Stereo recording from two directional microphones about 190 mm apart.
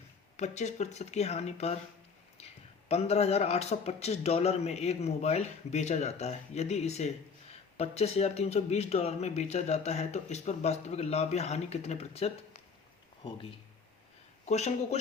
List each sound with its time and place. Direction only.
0.3 s speech: 35° left (ahead or behind)
2.4 s a sound: 35° left (ahead or behind)
2.9 s speech: 35° left (ahead or behind)
14.4 s speech: 35° left (ahead or behind)